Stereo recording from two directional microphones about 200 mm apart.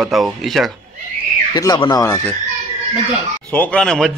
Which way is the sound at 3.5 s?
5° left (ahead or behind).